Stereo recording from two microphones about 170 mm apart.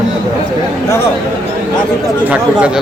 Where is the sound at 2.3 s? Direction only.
5° right (ahead or behind).